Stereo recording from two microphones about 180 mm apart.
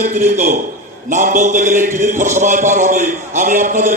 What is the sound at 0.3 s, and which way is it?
A man's voice, 45° right (ahead or behind).